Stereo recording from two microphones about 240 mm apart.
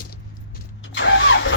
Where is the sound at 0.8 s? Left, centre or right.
Left.